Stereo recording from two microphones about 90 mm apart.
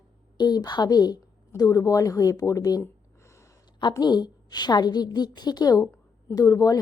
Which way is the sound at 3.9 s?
50° left (ahead or behind).